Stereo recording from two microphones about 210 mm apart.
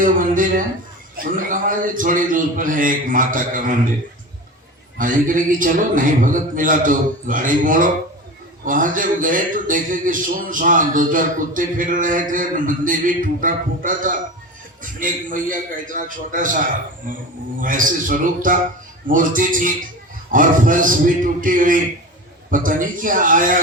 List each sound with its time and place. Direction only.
0.0 s a man's voice: 40° right (ahead or behind)
4.9 s a man's voice: 40° right (ahead or behind)